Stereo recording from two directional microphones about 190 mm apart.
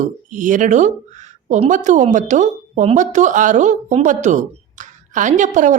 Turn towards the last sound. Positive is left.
turn(degrees=-40)  # may be behind; listen again after turning